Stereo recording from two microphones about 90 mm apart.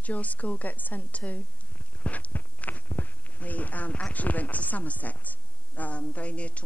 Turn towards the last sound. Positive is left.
turn(degrees=15)  # may be behind; listen again after turning